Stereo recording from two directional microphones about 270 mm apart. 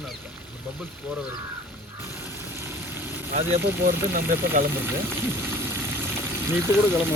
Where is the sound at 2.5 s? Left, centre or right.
Centre.